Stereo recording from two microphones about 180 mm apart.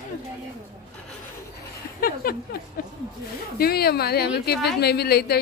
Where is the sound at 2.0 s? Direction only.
55° left (ahead or behind).